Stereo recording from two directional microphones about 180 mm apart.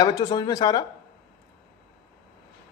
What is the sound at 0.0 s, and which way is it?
Speech, 20° left (ahead or behind).